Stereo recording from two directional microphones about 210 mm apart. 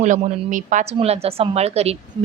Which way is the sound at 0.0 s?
35° right (ahead or behind).